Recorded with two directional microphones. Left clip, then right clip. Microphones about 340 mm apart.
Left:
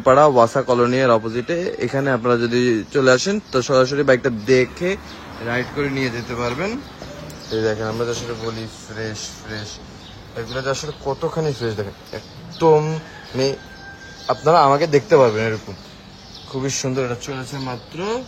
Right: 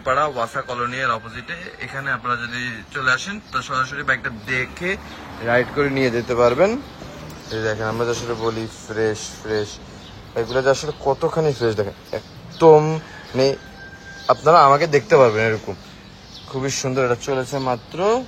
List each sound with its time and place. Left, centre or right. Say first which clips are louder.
0.7 s speech: left 5 dB; centre
10.3 s speech: right 6 dB; centre